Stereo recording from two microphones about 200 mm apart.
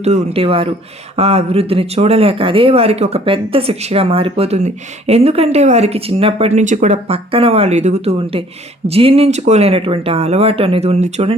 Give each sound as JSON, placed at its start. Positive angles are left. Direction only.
{"t": 0.0, "sound": "speech", "side_deg": -35}